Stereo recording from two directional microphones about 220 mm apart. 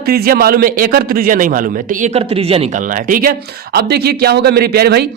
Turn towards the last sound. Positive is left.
turn(degrees=-45)  # may be behind; listen again after turning